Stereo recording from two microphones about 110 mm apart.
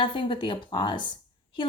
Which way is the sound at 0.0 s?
50° left (ahead or behind).